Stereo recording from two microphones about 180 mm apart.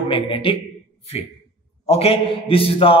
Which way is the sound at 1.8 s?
35° left (ahead or behind).